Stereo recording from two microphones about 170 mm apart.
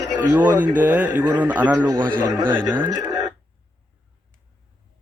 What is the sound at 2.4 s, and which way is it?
Speech, 5° left (ahead or behind).